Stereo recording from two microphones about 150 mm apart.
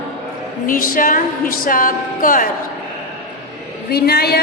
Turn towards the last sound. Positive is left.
turn(degrees=90)